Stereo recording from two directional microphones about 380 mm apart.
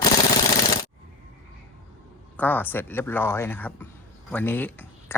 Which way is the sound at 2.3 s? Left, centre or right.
Centre.